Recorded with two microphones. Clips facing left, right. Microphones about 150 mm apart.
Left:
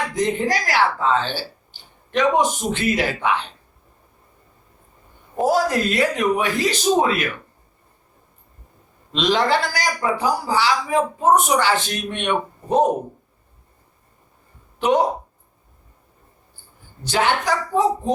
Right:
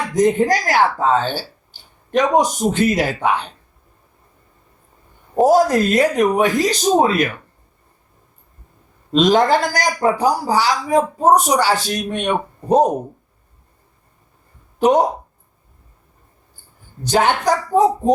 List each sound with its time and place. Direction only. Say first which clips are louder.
0.1 s speech: right 10 dB; 45° right (ahead or behind)
5.4 s speech: right 6 dB; 40° right (ahead or behind)
9.1 s speech: right 5 dB; 45° right (ahead or behind)
14.8 s speech: right 4 dB; 40° right (ahead or behind)
17.0 s speech: right 4 dB; 45° right (ahead or behind)